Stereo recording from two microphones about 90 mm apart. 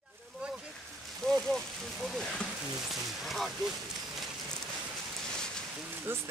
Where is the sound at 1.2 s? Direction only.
5° left (ahead or behind).